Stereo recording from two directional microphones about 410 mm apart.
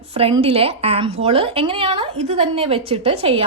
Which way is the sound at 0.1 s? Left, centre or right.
Centre.